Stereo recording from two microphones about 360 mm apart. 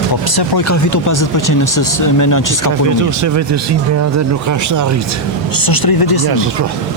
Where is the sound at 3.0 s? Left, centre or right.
Right.